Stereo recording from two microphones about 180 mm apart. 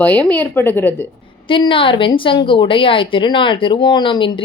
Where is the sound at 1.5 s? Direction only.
30° left (ahead or behind).